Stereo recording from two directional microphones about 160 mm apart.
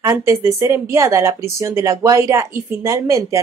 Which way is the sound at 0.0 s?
20° right (ahead or behind).